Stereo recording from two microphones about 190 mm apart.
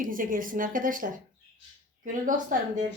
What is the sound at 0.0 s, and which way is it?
Speech, 45° right (ahead or behind).